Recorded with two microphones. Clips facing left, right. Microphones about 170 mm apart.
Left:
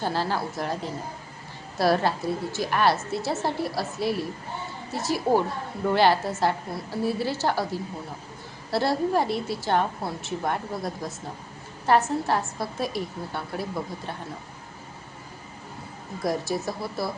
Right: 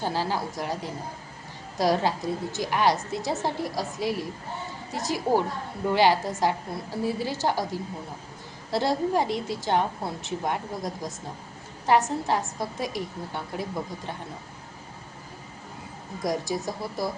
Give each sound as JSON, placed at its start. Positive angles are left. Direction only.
{"t": 0.0, "sound": "a woman's voice", "side_deg": -15}
{"t": 16.2, "sound": "a woman's voice", "side_deg": -15}